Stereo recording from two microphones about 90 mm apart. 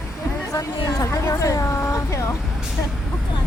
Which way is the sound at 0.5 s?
35° left (ahead or behind).